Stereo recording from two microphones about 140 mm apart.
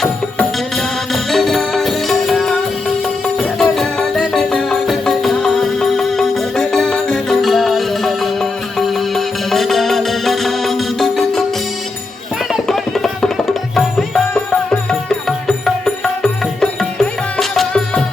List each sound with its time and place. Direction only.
1.1 s music: centre (ahead or behind)
3.6 s music: centre (ahead or behind)
12.6 s music: 5° left (ahead or behind)
16.2 s music: 5° left (ahead or behind)